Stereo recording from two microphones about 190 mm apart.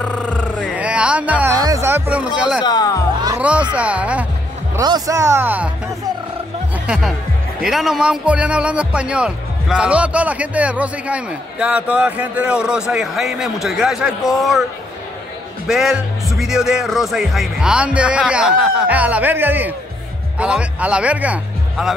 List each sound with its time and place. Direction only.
0.0 s a sound: 5° left (ahead or behind)
0.7 s music: 5° right (ahead or behind)
1.6 s speech: 15° right (ahead or behind)
2.6 s speech: 20° left (ahead or behind)
3.3 s a man's voice: 5° right (ahead or behind)
4.7 s a man's voice: 20° right (ahead or behind)
6.9 s speech: 5° right (ahead or behind)
15.6 s speech: centre (ahead or behind)